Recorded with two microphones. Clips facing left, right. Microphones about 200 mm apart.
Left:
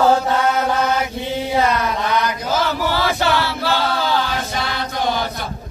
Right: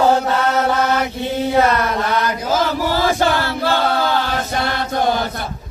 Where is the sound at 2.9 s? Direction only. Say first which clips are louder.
Right 3 dB; 45° right (ahead or behind).